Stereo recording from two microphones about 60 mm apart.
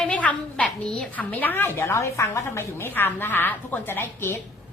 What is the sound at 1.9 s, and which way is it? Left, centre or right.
A woman's voice, left.